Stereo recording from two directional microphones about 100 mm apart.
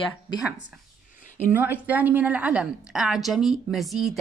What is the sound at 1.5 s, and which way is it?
Speech, 15° right (ahead or behind).